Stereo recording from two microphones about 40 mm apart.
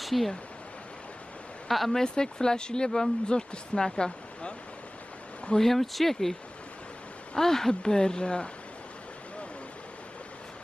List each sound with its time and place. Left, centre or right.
0.0 s speech: centre
1.7 s speech: centre
2.0 s speech: centre
5.6 s speech: centre
7.3 s speech: centre